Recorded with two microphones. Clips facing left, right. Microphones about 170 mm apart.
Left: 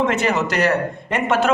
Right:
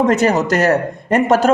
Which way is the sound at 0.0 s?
40° right (ahead or behind).